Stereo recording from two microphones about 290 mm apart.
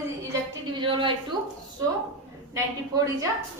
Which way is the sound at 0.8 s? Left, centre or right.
Centre.